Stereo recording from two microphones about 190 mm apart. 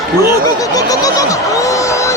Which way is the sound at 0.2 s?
20° left (ahead or behind).